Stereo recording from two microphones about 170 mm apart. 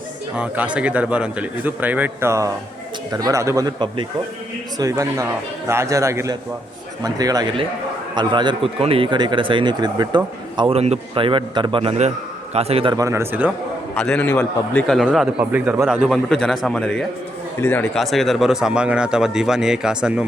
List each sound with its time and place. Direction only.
0.3 s a man's voice: 10° right (ahead or behind); by 10.2 s 25° right (ahead or behind)
10.6 s a man's voice: 35° right (ahead or behind)
13.0 s a man's voice: 15° right (ahead or behind)
13.9 s a man's voice: 5° left (ahead or behind)
18.0 s a man's voice: centre (ahead or behind)